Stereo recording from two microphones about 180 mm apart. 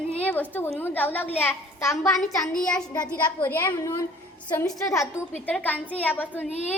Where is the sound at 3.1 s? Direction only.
10° left (ahead or behind).